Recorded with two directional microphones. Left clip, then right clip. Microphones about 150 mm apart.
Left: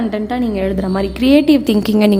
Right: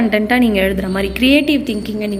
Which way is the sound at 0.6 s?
20° left (ahead or behind).